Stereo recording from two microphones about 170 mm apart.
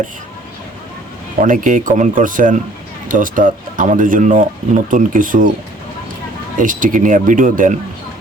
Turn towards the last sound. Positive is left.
turn(degrees=-50)  # may be behind; listen again after turning